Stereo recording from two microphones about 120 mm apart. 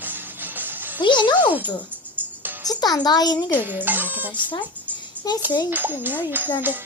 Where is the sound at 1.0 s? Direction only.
40° left (ahead or behind).